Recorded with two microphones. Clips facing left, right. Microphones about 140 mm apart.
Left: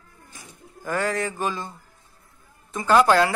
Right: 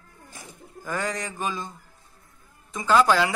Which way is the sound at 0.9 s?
15° right (ahead or behind).